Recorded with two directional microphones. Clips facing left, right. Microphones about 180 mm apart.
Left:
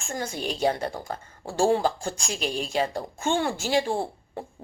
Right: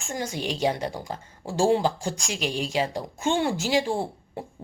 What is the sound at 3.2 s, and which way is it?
Speech, 20° right (ahead or behind).